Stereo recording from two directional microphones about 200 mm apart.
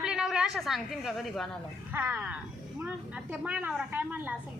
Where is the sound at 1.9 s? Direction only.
10° right (ahead or behind).